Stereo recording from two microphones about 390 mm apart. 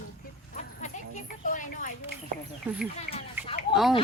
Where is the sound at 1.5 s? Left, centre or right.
Centre.